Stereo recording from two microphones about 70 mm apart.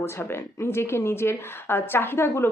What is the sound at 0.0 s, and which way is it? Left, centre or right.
A woman's voice, left.